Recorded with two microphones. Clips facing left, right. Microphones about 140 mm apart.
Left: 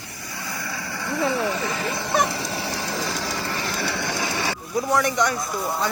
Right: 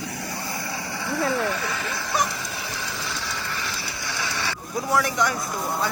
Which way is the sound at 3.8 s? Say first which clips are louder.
Left 6 dB; 65° left (ahead or behind).